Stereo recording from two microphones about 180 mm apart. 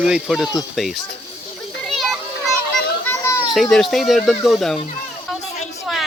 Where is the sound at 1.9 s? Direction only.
Centre (ahead or behind).